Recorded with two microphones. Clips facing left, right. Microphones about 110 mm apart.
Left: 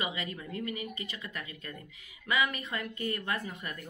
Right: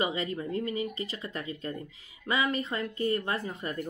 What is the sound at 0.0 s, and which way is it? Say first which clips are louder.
Speech: right 6 dB; 35° right (ahead or behind).